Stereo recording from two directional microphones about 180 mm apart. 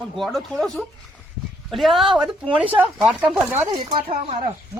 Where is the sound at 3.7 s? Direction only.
25° right (ahead or behind).